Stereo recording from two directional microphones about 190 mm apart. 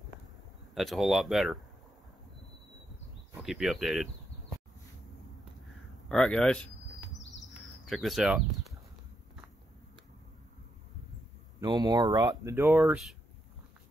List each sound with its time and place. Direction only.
0.7 s speech: centre (ahead or behind)
3.4 s speech: centre (ahead or behind)
6.0 s speech: 5° left (ahead or behind)
7.8 s speech: centre (ahead or behind)
11.6 s speech: 20° right (ahead or behind); by 13.1 s 5° right (ahead or behind)